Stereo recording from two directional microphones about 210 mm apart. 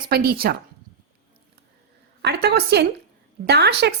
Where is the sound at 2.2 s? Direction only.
50° right (ahead or behind).